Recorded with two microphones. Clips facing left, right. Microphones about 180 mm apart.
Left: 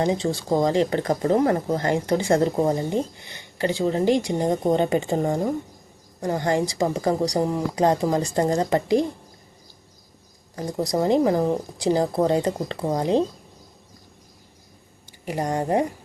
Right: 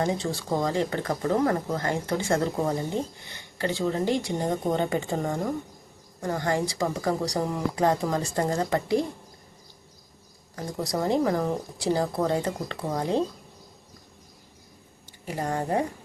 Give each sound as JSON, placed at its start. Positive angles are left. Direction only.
{"t": 0.0, "sound": "speech", "side_deg": 20}
{"t": 10.5, "sound": "speech", "side_deg": 20}
{"t": 15.3, "sound": "speech", "side_deg": 15}